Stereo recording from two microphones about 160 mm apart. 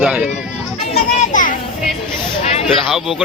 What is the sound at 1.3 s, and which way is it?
Children playing, 55° left (ahead or behind).